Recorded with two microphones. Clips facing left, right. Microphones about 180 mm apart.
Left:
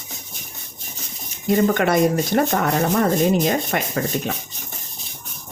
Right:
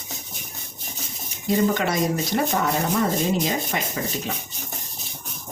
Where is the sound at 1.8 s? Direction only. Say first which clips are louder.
Left 6 dB; 55° left (ahead or behind).